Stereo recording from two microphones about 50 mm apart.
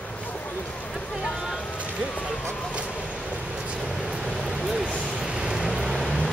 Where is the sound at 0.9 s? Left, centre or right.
Centre.